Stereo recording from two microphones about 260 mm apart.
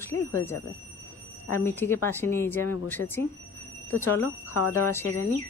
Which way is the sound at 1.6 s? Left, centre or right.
Centre.